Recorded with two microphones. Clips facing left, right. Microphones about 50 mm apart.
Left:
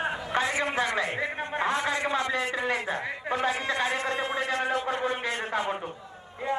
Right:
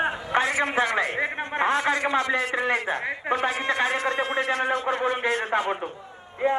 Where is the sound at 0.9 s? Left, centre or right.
Right.